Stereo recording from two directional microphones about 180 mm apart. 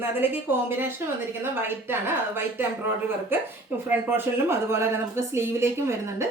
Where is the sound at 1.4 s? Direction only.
10° right (ahead or behind).